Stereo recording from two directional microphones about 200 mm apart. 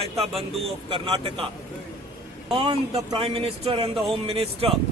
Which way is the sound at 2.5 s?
25° right (ahead or behind).